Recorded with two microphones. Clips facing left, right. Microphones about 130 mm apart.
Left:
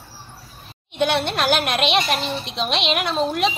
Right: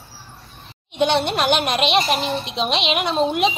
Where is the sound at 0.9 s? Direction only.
Centre (ahead or behind).